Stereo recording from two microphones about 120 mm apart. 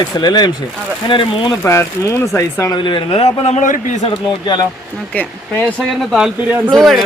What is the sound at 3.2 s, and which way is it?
Speech, 65° left (ahead or behind).